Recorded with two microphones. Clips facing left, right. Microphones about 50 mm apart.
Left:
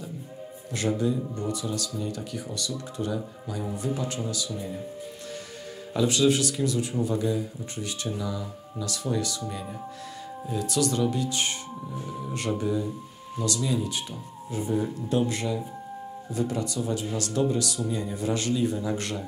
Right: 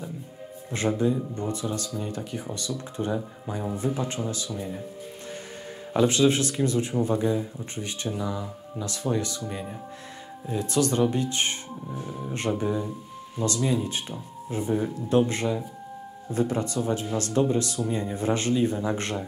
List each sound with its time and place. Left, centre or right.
0.7 s speech: right
5.9 s speech: right
12.1 s speech: centre